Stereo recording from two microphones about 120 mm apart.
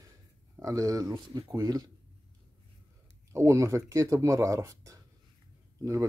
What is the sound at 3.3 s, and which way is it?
Speech, 25° right (ahead or behind).